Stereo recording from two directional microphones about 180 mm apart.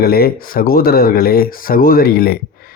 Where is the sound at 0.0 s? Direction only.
60° left (ahead or behind).